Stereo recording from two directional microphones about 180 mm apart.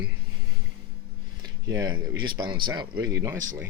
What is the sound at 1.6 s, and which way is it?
Speech, 20° right (ahead or behind).